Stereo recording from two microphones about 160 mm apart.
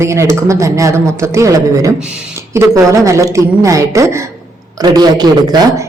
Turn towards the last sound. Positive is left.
turn(degrees=-25)  # may be behind; listen again after turning